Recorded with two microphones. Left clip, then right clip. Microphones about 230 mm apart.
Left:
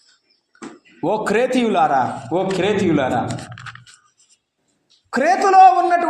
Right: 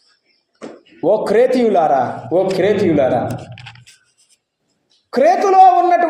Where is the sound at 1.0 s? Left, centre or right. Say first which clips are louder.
Right 5 dB; left.